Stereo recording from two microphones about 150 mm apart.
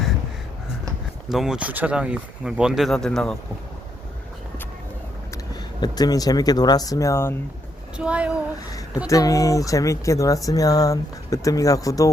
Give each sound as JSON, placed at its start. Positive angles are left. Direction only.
{"t": 1.3, "sound": "speech", "side_deg": -5}
{"t": 5.3, "sound": "speech", "side_deg": 25}
{"t": 7.9, "sound": "speech", "side_deg": -5}
{"t": 9.0, "sound": "speech", "side_deg": 20}